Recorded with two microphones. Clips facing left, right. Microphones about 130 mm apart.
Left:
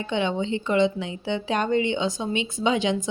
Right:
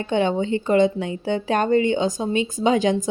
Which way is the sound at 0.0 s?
45° right (ahead or behind).